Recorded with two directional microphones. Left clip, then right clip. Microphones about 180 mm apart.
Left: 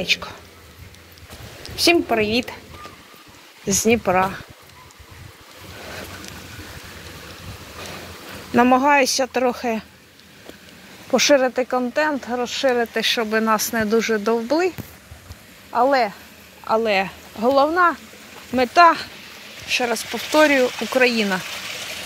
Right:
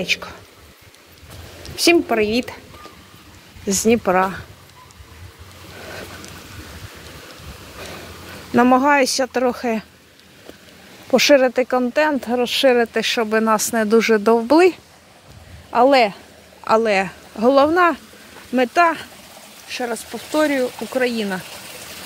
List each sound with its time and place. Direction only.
0.0 s speech: 45° right (ahead or behind)
2.0 s speech: 35° right (ahead or behind)
3.6 s speech: 40° right (ahead or behind)
8.5 s speech: 30° right (ahead or behind)
11.1 s speech: 60° right (ahead or behind)
12.7 s speech: 40° right (ahead or behind)
13.8 s speech: 50° right (ahead or behind)
15.7 s speech: 65° right (ahead or behind)
16.8 s speech: 40° right (ahead or behind)
17.5 s speech: 55° right (ahead or behind)
18.5 s speech: 30° right (ahead or behind)
19.7 s speech: 10° right (ahead or behind)